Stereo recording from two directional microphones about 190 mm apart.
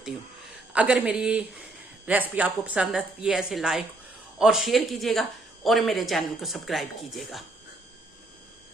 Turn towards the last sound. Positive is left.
turn(degrees=0)  # may be behind; listen again after turning